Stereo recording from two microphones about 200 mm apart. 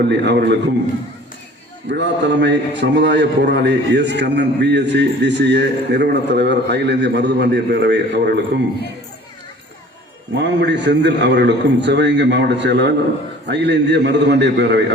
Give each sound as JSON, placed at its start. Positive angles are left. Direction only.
{"t": 0.1, "sound": "a man's voice", "side_deg": -60}
{"t": 1.9, "sound": "a man's voice", "side_deg": -60}
{"t": 10.3, "sound": "a man's voice", "side_deg": -60}